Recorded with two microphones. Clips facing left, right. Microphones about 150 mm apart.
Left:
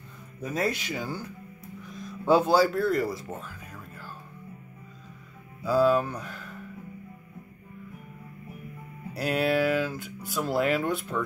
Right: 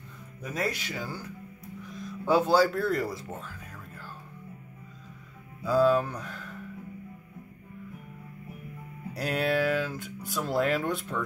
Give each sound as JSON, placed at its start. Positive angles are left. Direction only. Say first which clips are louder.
{"t": 0.4, "sound": "speech", "louder": "left 3 dB", "side_deg": 25}
{"t": 2.2, "sound": "speech", "louder": "left 3 dB", "side_deg": 25}
{"t": 2.5, "sound": "speech", "louder": "left 1 dB", "side_deg": 5}
{"t": 5.7, "sound": "speech", "louder": "left 1 dB", "side_deg": 5}
{"t": 9.1, "sound": "speech", "louder": "left 2 dB", "side_deg": 5}